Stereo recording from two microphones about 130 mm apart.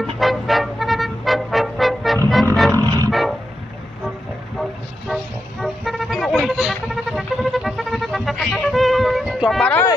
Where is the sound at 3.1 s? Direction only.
Centre (ahead or behind).